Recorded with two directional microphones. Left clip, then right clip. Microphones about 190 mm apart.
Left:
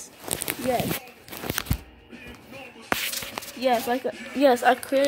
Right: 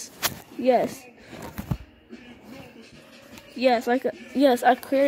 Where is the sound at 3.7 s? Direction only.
20° right (ahead or behind).